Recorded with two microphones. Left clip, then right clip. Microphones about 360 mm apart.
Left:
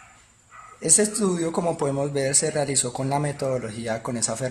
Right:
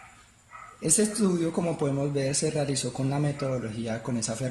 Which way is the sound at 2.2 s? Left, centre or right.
Centre.